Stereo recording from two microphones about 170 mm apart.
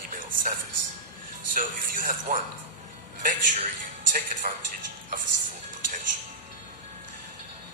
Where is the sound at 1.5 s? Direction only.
55° right (ahead or behind).